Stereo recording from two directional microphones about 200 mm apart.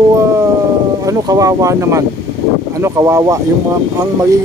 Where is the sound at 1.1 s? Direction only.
15° right (ahead or behind).